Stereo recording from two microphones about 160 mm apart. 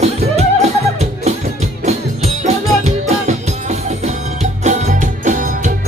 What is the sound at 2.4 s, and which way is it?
Music, 45° right (ahead or behind).